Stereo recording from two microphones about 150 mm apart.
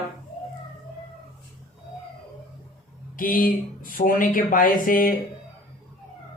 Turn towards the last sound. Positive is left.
turn(degrees=65)  # may be behind; listen again after turning